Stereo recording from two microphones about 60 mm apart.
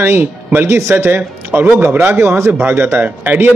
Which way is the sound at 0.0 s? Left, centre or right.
Right.